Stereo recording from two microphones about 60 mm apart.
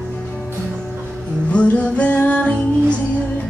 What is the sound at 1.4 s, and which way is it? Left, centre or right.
Music, left.